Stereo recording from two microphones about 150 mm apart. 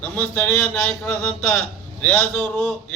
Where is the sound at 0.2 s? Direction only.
10° left (ahead or behind).